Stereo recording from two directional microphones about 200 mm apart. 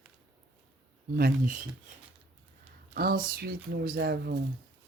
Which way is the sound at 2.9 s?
50° right (ahead or behind).